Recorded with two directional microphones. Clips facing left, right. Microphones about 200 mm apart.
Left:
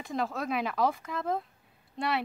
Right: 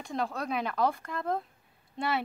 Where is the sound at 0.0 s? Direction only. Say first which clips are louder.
Left 1 dB; centre (ahead or behind).